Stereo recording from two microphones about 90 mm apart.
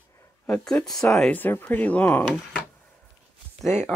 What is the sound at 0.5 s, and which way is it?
Speech, 10° left (ahead or behind).